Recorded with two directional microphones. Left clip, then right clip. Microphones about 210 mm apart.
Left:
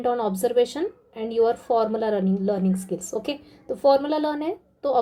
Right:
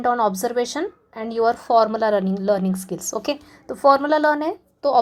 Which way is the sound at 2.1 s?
20° right (ahead or behind).